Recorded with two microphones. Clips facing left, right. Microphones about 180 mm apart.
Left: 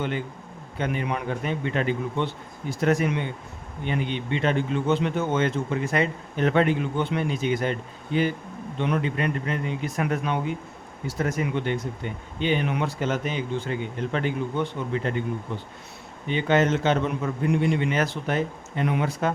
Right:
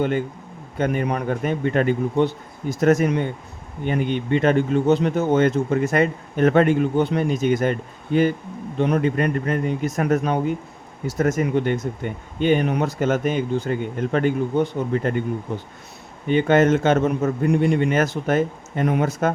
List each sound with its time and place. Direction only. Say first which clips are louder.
0.8 s a man's voice: right 5 dB; 45° right (ahead or behind)